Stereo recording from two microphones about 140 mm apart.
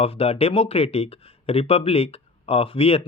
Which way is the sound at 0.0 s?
45° left (ahead or behind).